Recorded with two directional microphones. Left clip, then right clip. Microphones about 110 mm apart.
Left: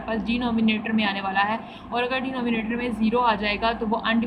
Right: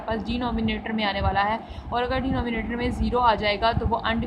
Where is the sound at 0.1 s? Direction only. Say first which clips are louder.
Left 2 dB; 25° right (ahead or behind).